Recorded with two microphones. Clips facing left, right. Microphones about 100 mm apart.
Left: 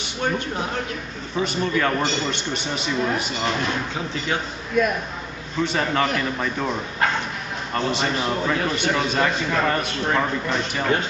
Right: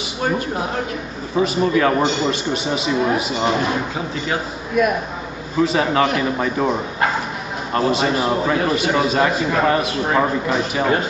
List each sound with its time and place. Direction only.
1.4 s a man's voice: 5° right (ahead or behind)
3.4 s a man's voice: 30° right (ahead or behind)
5.6 s a man's voice: 5° right (ahead or behind)